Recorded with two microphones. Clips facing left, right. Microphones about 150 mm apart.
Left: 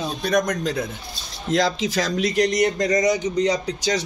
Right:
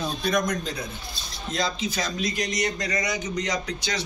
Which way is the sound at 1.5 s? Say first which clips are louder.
Left 7 dB; 90° left.